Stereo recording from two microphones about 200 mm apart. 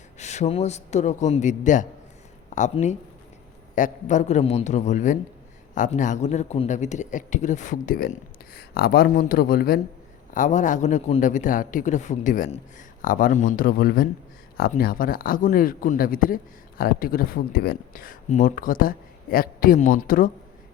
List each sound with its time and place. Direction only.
0.2 s speech: 35° left (ahead or behind)